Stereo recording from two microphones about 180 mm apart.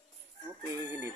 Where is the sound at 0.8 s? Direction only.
15° right (ahead or behind).